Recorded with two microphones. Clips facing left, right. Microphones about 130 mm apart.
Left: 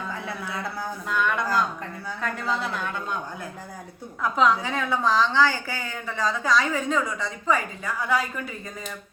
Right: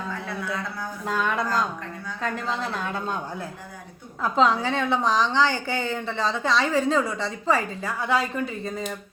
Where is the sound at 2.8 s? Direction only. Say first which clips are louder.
Right 1 dB; 35° right (ahead or behind).